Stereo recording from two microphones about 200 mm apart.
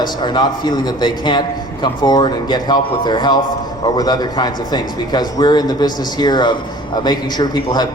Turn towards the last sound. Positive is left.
turn(degrees=20)  # may be behind; listen again after turning